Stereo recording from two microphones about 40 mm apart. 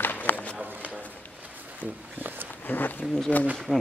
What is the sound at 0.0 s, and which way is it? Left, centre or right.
Run, left.